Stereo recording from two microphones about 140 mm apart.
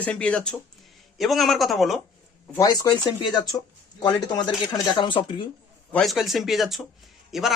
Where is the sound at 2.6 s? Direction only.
30° left (ahead or behind).